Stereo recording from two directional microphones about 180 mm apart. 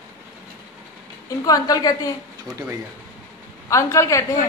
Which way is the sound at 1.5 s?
20° left (ahead or behind).